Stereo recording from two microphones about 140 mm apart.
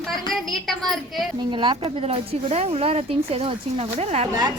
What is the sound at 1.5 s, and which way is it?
Speech, 40° right (ahead or behind).